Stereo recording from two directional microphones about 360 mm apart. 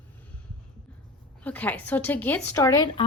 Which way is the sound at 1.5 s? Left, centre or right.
Centre.